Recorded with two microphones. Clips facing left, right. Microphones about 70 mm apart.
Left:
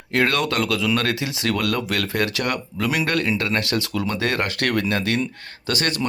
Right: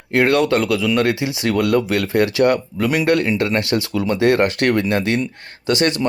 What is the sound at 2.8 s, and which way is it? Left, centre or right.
Speech, centre.